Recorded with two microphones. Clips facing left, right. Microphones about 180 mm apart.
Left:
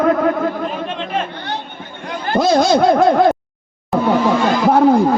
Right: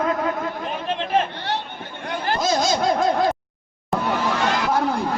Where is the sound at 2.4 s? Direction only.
60° left (ahead or behind).